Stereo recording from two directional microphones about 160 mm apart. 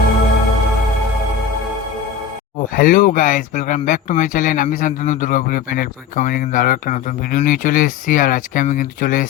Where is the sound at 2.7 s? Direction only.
60° left (ahead or behind).